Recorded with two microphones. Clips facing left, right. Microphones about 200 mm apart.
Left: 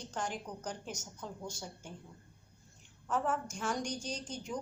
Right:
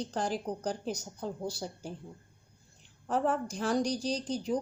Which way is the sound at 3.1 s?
35° right (ahead or behind).